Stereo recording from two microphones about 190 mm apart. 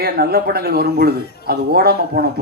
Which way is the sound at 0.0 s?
55° right (ahead or behind).